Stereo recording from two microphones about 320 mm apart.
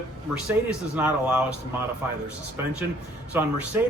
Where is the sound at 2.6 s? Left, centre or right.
Centre.